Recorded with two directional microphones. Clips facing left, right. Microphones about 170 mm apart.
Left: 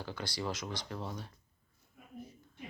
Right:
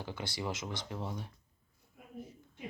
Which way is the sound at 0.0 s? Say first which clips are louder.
Even; 20° right (ahead or behind).